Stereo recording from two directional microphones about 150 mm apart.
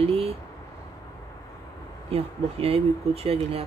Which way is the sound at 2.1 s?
40° right (ahead or behind).